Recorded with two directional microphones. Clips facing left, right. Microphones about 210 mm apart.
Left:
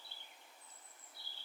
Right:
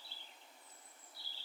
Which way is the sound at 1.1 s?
55° left (ahead or behind).